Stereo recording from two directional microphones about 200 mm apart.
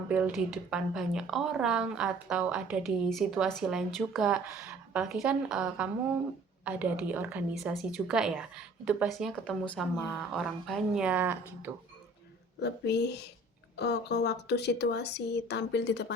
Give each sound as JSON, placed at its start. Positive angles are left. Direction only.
{"t": 0.1, "sound": "a woman's voice", "side_deg": -5}
{"t": 12.5, "sound": "speech", "side_deg": 60}